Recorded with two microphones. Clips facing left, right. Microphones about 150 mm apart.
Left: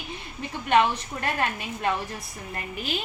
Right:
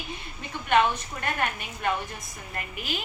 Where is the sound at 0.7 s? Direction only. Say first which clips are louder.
Left 1 dB; 30° left (ahead or behind).